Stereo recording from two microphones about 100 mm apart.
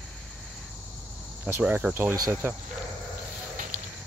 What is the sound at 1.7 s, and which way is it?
Speech, 15° right (ahead or behind).